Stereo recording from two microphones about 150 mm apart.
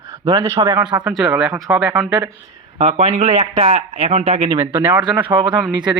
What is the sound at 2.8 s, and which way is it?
Speech, 45° right (ahead or behind).